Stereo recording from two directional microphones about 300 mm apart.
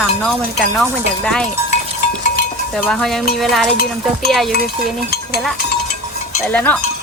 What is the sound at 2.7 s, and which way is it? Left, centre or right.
Speech, centre.